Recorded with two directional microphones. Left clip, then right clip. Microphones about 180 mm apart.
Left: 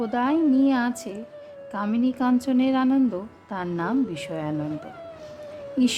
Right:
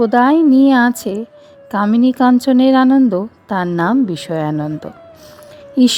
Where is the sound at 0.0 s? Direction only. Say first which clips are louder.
Right 12 dB; 50° right (ahead or behind).